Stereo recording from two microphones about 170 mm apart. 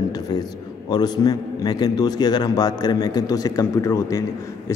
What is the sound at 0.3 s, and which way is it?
A man's voice, 25° left (ahead or behind).